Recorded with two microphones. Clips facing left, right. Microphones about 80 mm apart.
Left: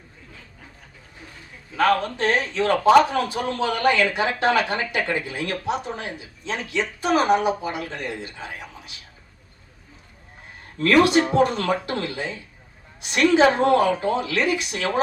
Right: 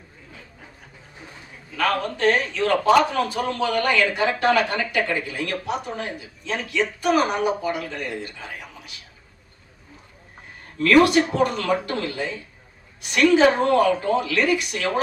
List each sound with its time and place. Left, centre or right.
1.7 s a man's voice: left
10.8 s speech: left